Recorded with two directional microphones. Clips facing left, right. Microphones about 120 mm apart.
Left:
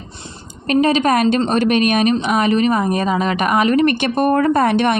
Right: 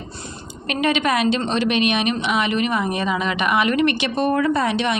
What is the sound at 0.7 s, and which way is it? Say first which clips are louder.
Speech: left 6 dB; 35° left (ahead or behind).